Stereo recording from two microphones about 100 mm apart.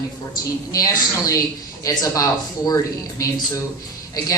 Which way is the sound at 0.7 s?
35° left (ahead or behind).